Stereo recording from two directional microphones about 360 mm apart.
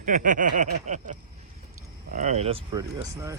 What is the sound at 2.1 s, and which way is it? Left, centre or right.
Speech, centre.